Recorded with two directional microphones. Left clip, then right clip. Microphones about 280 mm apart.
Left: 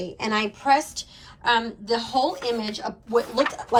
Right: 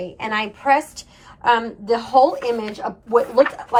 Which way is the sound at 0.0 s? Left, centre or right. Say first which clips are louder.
Right 2 dB; centre.